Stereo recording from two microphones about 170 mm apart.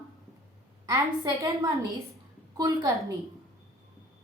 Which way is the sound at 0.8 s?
20° right (ahead or behind).